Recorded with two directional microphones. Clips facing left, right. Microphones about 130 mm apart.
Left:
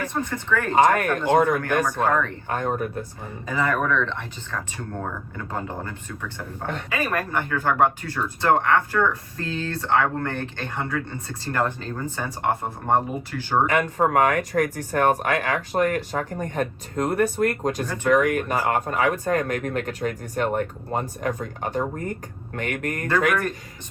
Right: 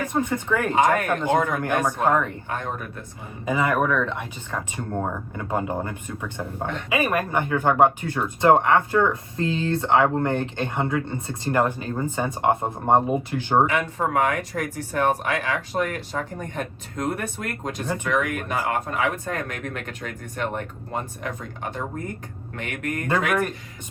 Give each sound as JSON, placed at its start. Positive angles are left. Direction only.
{"t": 0.0, "sound": "speech", "side_deg": -15}
{"t": 2.5, "sound": "speech", "side_deg": 40}
{"t": 3.4, "sound": "speech", "side_deg": -15}
{"t": 13.7, "sound": "speech", "side_deg": 45}